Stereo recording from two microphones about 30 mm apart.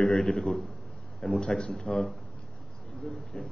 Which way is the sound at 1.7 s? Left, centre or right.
Centre.